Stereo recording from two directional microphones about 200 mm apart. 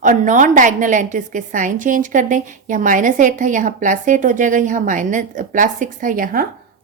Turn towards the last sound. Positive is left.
turn(degrees=-45)  # may be behind; listen again after turning